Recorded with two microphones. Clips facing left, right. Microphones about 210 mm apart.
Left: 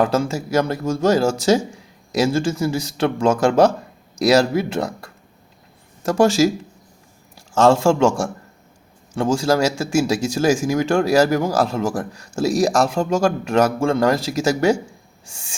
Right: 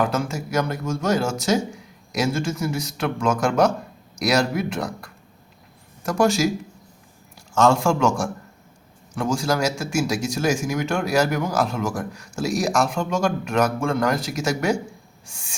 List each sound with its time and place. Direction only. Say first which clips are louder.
0.0 s speech: left 4 dB; 30° left (ahead or behind)
7.5 s speech: left 4 dB; 30° left (ahead or behind)